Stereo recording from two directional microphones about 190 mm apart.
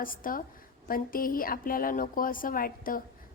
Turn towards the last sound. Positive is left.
turn(degrees=45)  # may be behind; listen again after turning